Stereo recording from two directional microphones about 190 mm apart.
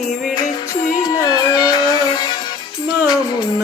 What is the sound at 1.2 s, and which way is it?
Music, 20° left (ahead or behind).